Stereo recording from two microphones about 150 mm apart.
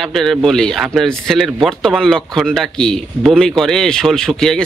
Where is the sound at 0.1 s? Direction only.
Centre (ahead or behind).